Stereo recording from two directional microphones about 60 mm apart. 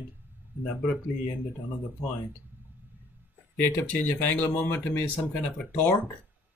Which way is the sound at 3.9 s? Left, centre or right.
Left.